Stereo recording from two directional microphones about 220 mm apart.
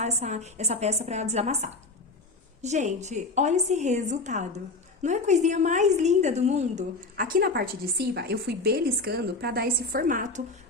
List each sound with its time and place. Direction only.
0.0 s a woman's voice: 30° right (ahead or behind)